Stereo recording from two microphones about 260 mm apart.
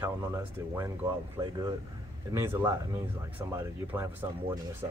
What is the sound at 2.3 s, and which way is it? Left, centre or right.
Speech, centre.